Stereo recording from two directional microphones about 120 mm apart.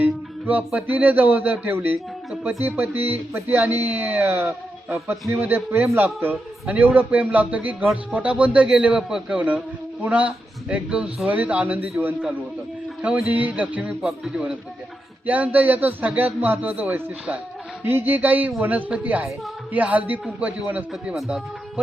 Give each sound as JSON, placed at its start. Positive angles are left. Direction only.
{"t": 0.0, "sound": "speech", "side_deg": -15}